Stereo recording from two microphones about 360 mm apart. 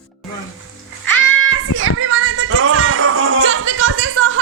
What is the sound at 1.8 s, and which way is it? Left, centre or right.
Music, right.